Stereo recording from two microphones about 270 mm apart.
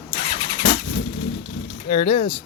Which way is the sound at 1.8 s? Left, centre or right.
Left.